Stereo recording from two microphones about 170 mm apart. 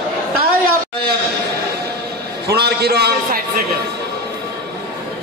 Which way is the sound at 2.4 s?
70° right (ahead or behind).